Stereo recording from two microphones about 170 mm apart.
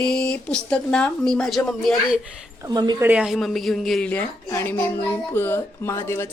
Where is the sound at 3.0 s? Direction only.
5° right (ahead or behind).